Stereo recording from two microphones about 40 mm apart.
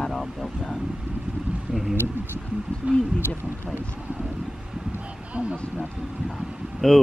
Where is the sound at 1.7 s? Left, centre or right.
Right.